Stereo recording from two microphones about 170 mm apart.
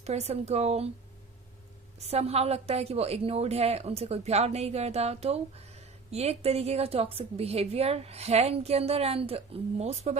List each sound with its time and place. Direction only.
0.0 s a woman's voice: 40° right (ahead or behind)
2.0 s a woman's voice: 40° right (ahead or behind)